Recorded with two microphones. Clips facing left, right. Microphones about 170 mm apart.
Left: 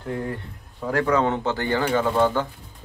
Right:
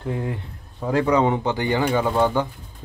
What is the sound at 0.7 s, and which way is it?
Speech, 15° right (ahead or behind).